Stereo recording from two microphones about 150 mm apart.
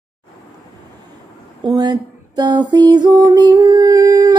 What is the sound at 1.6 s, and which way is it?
Music, 30° right (ahead or behind).